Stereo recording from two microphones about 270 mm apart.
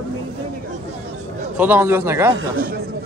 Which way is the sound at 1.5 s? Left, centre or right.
Centre.